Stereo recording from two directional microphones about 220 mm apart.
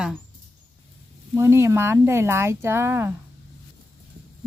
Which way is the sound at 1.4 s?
10° right (ahead or behind).